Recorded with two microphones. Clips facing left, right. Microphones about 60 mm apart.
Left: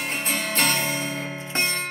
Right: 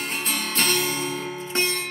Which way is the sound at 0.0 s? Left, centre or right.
Left.